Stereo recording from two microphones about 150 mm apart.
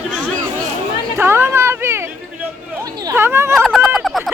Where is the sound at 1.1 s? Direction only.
15° right (ahead or behind).